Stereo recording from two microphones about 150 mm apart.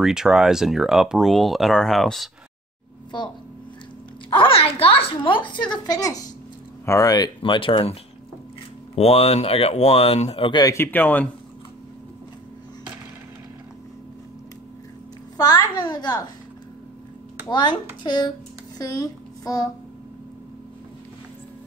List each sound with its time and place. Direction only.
0.0 s speech: 5° right (ahead or behind)
4.3 s a woman's voice: 35° left (ahead or behind)
10.6 s speech: 20° left (ahead or behind)
15.3 s a child's voice: 25° left (ahead or behind)
17.5 s a woman's voice: 30° left (ahead or behind)